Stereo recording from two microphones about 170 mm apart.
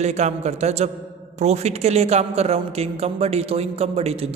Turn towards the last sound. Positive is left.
turn(degrees=-35)  # may be behind; listen again after turning